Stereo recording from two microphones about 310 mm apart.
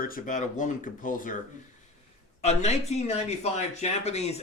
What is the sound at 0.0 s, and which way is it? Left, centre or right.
Speech, left.